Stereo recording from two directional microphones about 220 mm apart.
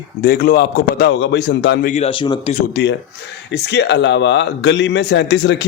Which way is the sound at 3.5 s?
50° left (ahead or behind).